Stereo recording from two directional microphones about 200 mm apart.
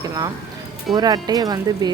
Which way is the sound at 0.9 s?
20° right (ahead or behind).